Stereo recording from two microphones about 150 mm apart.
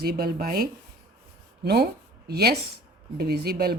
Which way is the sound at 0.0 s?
90° right.